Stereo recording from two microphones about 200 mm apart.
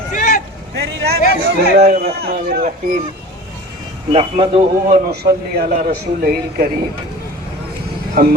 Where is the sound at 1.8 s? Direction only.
45° right (ahead or behind).